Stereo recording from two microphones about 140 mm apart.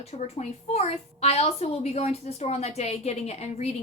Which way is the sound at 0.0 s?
50° left (ahead or behind).